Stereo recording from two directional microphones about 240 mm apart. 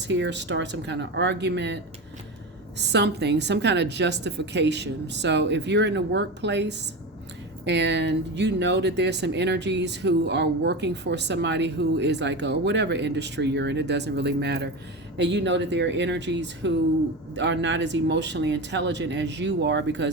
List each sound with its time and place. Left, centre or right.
0.1 s speech: right